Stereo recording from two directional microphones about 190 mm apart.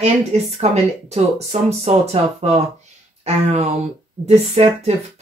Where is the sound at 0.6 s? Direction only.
35° right (ahead or behind).